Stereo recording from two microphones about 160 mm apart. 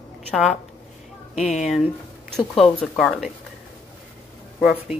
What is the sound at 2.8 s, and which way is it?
Speech, centre (ahead or behind).